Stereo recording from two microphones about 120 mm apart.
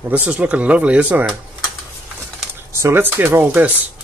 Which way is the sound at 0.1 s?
10° right (ahead or behind).